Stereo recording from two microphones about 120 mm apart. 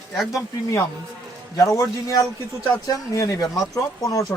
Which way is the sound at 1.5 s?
25° left (ahead or behind).